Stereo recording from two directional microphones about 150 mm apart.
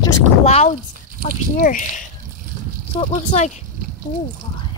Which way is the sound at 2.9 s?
45° left (ahead or behind).